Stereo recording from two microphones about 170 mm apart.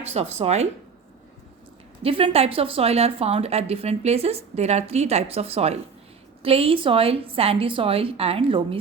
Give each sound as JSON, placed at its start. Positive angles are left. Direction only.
{"t": 0.0, "sound": "a woman's voice", "side_deg": -40}
{"t": 2.0, "sound": "a woman's voice", "side_deg": -35}